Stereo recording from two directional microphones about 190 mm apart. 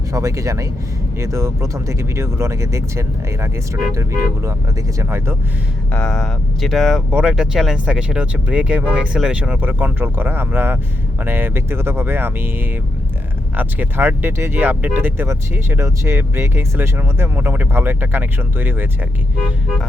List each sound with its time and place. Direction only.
0.1 s speech: 15° right (ahead or behind)
5.9 s speech: 5° left (ahead or behind); by 18.9 s 10° right (ahead or behind)